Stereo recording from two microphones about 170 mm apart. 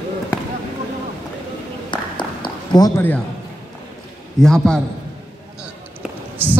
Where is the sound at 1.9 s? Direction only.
30° left (ahead or behind).